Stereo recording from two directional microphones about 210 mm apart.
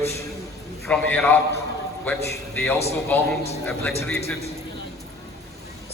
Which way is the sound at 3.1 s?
10° left (ahead or behind).